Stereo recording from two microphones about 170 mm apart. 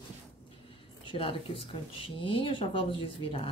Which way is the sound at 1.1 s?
30° left (ahead or behind).